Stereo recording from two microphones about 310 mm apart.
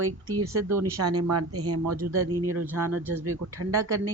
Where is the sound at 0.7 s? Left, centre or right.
Right.